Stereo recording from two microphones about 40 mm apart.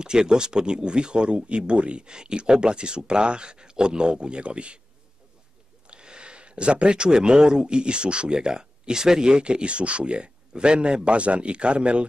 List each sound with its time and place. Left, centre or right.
0.0 s speech: centre
5.9 s speech: right